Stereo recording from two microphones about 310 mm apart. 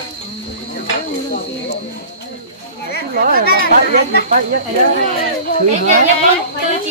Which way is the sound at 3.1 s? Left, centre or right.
Right.